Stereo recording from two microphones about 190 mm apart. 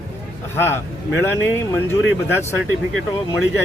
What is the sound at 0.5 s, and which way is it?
Speech, 15° left (ahead or behind).